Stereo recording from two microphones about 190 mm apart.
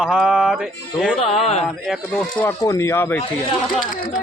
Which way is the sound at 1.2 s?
30° left (ahead or behind).